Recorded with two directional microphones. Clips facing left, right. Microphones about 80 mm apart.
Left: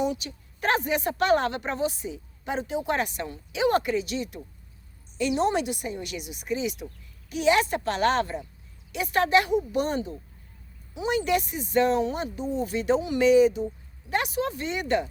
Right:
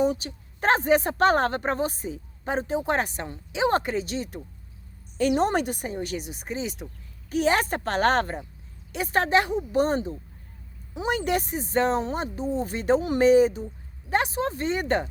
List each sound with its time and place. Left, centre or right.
0.0 s speech: right